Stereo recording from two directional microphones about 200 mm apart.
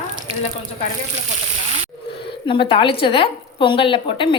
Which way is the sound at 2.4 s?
25° left (ahead or behind).